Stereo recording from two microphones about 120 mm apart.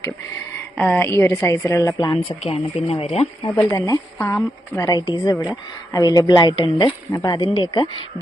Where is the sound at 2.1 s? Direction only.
50° left (ahead or behind).